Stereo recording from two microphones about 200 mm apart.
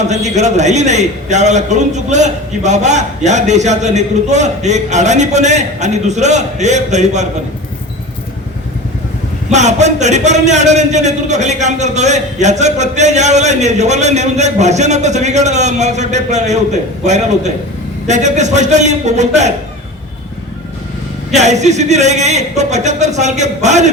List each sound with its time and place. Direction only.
0.1 s a man's voice: 35° right (ahead or behind)
9.5 s a man's voice: 35° right (ahead or behind)
21.3 s a man's voice: 35° right (ahead or behind)